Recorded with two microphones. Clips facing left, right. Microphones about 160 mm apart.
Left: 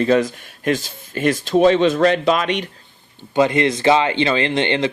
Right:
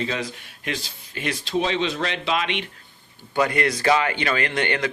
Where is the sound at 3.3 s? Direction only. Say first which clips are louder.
Left 6 dB; 20° left (ahead or behind).